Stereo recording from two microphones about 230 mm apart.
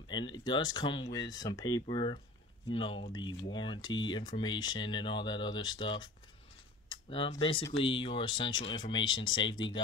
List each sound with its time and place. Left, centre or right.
0.1 s speech: centre